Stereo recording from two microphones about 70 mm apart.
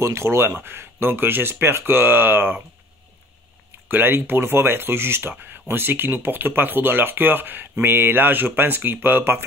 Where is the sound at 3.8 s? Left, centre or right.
Right.